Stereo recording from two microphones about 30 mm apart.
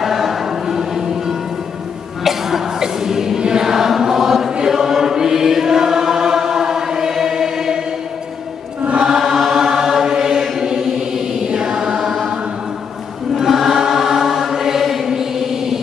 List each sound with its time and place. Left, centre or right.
0.0 s music: centre
2.8 s music: centre
3.3 s choir: right
3.6 s choir: centre
9.0 s chant: centre
11.4 s mantra: right
13.7 s chant: centre